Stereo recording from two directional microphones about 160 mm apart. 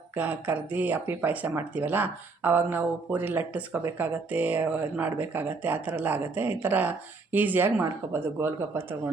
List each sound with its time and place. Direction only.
0.2 s speech: 10° right (ahead or behind)